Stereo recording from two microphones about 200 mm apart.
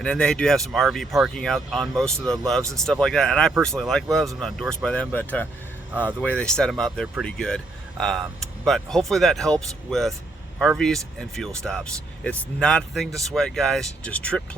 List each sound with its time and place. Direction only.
0.0 s speech: 5° left (ahead or behind)